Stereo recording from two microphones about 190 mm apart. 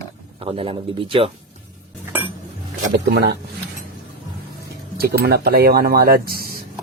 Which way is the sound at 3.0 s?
60° right (ahead or behind).